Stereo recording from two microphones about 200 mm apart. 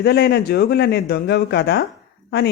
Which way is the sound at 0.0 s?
55° left (ahead or behind).